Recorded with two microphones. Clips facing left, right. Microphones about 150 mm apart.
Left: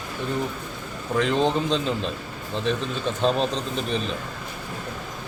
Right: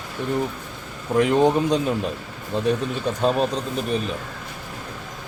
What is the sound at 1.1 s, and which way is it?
Speech, 15° right (ahead or behind).